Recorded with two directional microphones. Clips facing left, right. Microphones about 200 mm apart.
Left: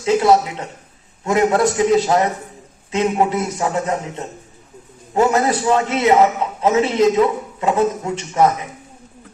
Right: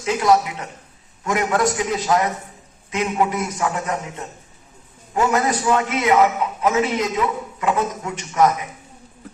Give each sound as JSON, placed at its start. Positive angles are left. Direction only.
{"t": 0.0, "sound": "a man's voice", "side_deg": 30}